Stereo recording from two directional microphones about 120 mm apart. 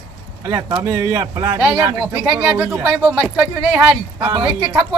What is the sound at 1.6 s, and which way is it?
Speech, 20° right (ahead or behind).